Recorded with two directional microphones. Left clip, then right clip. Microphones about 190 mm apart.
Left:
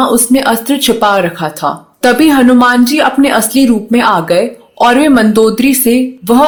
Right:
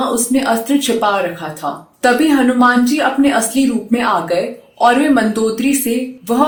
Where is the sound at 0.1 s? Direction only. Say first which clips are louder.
Left 5 dB; 50° left (ahead or behind).